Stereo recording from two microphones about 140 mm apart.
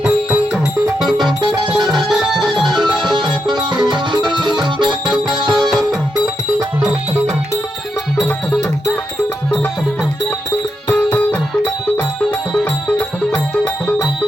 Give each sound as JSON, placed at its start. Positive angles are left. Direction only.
{"t": 0.0, "sound": "music", "side_deg": -5}
{"t": 1.2, "sound": "music", "side_deg": -30}
{"t": 2.0, "sound": "music", "side_deg": 0}
{"t": 3.0, "sound": "music", "side_deg": -35}
{"t": 10.8, "sound": "music", "side_deg": 15}